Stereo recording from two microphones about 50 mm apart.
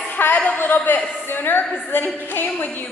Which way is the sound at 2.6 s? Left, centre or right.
Left.